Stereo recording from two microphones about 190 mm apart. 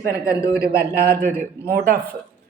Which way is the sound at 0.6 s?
50° right (ahead or behind).